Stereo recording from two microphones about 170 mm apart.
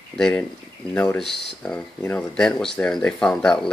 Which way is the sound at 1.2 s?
80° left.